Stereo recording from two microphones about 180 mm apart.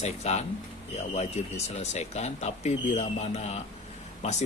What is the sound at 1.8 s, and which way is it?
Speech, 35° left (ahead or behind).